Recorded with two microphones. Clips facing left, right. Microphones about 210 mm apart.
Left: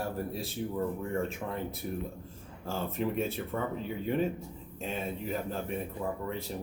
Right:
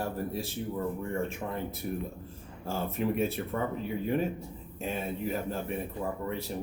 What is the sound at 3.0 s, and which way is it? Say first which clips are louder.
Speech: right 2 dB; 5° right (ahead or behind).